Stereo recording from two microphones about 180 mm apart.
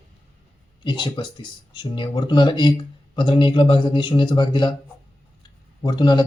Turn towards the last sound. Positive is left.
turn(degrees=25)  # may be behind; listen again after turning